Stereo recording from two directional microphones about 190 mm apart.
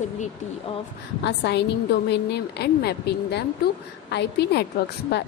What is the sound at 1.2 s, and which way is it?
A woman's voice, 65° left (ahead or behind).